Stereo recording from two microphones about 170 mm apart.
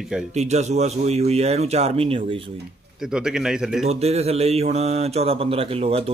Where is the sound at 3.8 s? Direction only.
40° right (ahead or behind).